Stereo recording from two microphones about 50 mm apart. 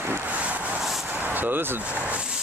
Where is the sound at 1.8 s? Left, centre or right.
Right.